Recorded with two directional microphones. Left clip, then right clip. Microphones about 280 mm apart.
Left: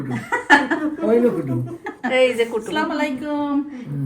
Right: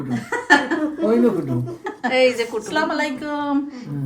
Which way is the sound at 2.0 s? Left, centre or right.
Centre.